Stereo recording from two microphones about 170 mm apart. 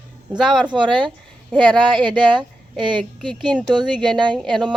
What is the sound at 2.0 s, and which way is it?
Speech, 25° right (ahead or behind).